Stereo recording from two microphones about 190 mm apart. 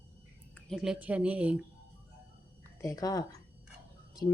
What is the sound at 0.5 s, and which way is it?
Speech, centre (ahead or behind).